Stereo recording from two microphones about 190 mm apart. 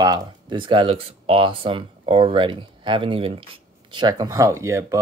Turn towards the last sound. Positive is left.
turn(degrees=-15)  # may be behind; listen again after turning